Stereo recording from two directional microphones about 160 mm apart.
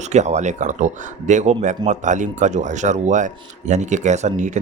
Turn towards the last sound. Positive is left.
turn(degrees=-50)  # may be behind; listen again after turning